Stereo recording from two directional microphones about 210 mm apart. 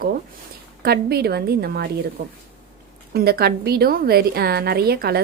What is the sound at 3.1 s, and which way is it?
A woman's voice, 50° right (ahead or behind).